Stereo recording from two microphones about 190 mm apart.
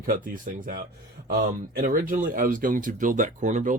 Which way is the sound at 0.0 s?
45° right (ahead or behind).